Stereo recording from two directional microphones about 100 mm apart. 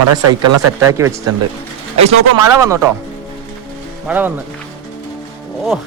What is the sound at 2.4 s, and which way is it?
Speech, 30° right (ahead or behind).